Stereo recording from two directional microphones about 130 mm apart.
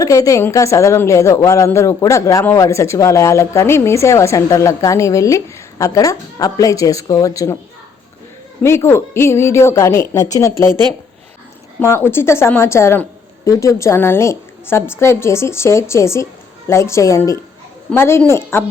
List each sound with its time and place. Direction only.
0.0 s speech: 25° left (ahead or behind)
8.6 s speech: 20° left (ahead or behind)
11.8 s speech: 20° left (ahead or behind)